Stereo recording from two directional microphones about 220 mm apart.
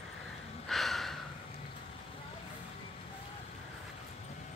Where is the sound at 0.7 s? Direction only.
Centre (ahead or behind).